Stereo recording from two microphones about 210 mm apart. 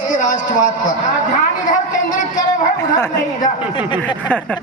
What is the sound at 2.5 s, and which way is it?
A man's voice, 15° left (ahead or behind).